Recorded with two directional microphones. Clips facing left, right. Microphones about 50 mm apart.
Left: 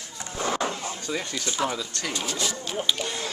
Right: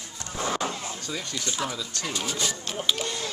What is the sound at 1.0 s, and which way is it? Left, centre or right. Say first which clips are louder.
Speech: left 4 dB; centre.